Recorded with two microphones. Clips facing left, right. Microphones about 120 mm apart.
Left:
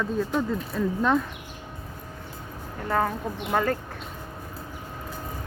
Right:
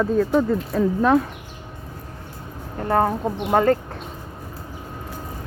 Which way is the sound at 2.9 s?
40° right (ahead or behind).